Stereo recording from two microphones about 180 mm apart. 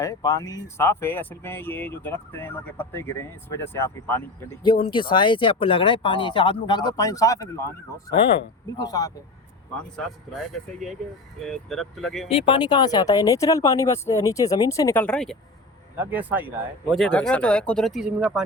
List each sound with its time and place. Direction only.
0.0 s speech: 20° left (ahead or behind)
4.6 s speech: 25° left (ahead or behind)
8.8 s speech: 20° left (ahead or behind)
11.4 s speech: centre (ahead or behind)
12.3 s speech: 30° left (ahead or behind); by 15.4 s 5° left (ahead or behind)
16.0 s speech: 10° right (ahead or behind)
16.9 s speech: 5° left (ahead or behind)